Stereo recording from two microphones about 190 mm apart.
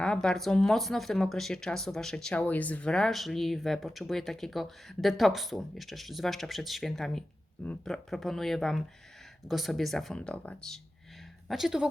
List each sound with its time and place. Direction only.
0.0 s speech: 5° left (ahead or behind)